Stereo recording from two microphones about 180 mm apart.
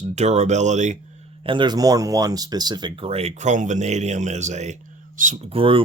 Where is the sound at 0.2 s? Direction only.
40° right (ahead or behind).